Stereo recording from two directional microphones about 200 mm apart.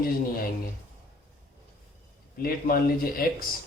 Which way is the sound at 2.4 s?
50° left (ahead or behind).